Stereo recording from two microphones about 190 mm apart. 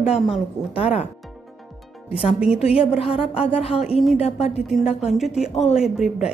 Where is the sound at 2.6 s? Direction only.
30° left (ahead or behind).